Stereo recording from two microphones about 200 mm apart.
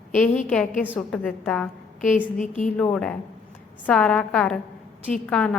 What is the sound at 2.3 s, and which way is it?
Speech, 40° left (ahead or behind).